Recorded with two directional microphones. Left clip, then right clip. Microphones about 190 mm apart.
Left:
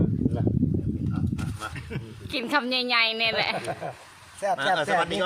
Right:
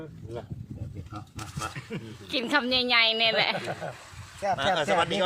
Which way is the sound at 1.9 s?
30° left (ahead or behind).